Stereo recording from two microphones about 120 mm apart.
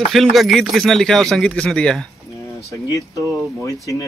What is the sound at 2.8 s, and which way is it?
Music, 30° left (ahead or behind).